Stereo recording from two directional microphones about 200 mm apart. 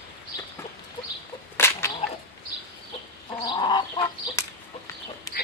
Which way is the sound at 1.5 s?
10° left (ahead or behind).